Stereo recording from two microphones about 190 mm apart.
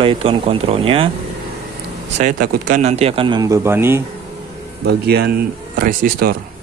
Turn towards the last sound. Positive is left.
turn(degrees=-50)  # may be behind; listen again after turning